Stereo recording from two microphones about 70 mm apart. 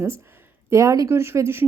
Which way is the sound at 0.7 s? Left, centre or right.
Right.